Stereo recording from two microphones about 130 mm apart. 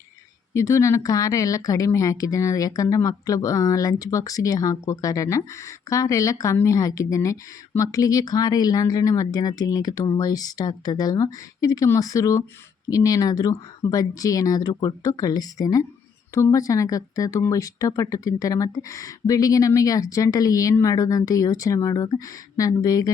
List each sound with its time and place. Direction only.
0.5 s speech: 25° left (ahead or behind)